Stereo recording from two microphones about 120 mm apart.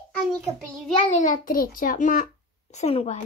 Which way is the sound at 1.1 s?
70° left (ahead or behind).